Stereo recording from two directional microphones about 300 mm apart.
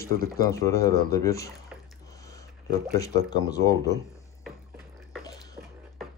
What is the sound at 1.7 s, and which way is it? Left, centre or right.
Water, centre.